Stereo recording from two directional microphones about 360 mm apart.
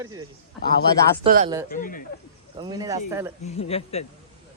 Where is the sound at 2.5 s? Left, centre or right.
Centre.